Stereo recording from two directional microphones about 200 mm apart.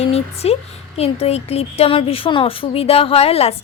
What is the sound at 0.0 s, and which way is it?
Speech, 30° left (ahead or behind).